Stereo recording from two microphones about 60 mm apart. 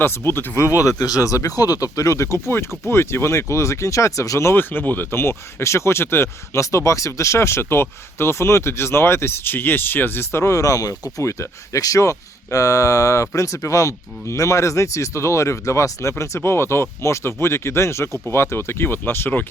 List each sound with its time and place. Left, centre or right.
0.0 s speech: left
4.5 s speech: left
11.2 s speech: left